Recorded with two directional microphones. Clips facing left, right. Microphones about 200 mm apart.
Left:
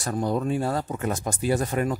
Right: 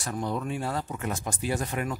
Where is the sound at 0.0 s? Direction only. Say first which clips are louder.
Left 5 dB; 40° left (ahead or behind).